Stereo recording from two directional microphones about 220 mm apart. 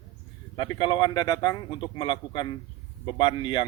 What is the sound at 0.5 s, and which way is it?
A man's voice, 20° left (ahead or behind).